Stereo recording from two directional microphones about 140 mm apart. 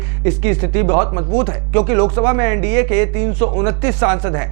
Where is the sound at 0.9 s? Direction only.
20° right (ahead or behind).